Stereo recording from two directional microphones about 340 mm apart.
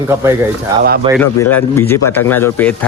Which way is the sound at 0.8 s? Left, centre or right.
Right.